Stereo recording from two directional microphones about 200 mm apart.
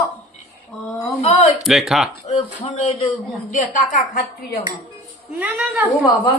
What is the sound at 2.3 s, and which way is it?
A woman's voice, 30° left (ahead or behind).